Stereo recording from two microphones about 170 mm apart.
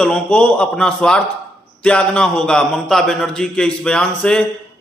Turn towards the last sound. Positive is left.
turn(degrees=5)  # may be behind; listen again after turning